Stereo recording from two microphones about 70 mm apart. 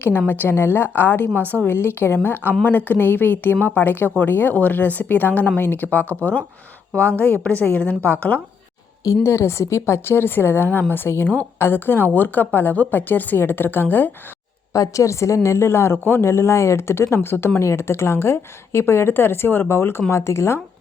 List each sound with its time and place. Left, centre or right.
0.3 s a woman's voice: left
9.2 s a woman's voice: left
14.7 s a woman's voice: left